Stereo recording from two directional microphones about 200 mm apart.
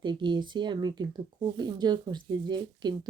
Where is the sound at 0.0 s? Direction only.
25° right (ahead or behind).